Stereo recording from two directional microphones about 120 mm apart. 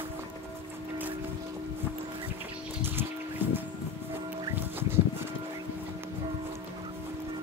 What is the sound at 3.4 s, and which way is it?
Music, 15° right (ahead or behind).